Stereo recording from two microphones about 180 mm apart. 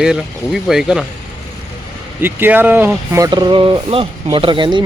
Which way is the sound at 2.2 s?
10° right (ahead or behind).